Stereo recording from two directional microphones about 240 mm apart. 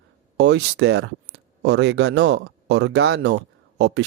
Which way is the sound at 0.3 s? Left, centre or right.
Right.